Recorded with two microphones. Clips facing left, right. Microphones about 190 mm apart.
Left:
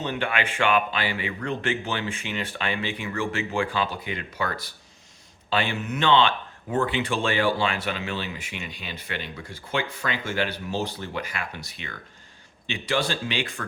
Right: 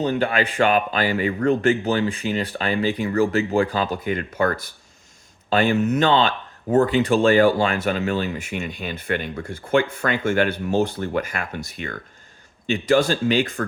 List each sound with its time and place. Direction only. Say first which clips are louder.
0.0 s speech: right 7 dB; 35° right (ahead or behind)